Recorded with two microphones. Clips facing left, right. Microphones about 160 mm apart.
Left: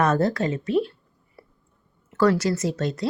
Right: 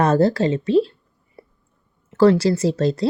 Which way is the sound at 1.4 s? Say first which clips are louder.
Right 5 dB; 25° right (ahead or behind).